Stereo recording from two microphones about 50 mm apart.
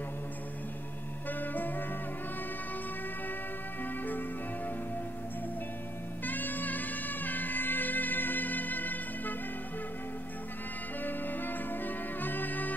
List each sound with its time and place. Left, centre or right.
1.4 s music: left
6.2 s music: left
11.1 s music: left